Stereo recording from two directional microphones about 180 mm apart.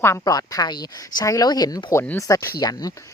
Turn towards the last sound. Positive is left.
turn(degrees=20)  # may be behind; listen again after turning